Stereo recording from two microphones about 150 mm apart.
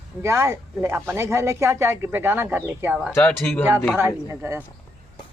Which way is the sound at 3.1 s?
10° left (ahead or behind).